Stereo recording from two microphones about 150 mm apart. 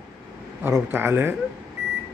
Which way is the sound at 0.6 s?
15° right (ahead or behind).